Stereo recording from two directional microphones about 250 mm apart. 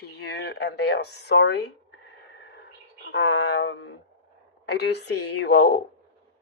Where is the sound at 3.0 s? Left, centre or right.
Left.